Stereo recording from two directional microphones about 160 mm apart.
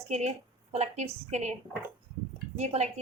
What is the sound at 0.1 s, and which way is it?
A woman's voice, 45° right (ahead or behind).